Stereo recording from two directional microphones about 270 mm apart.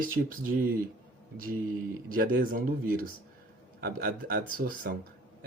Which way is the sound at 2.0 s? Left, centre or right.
Right.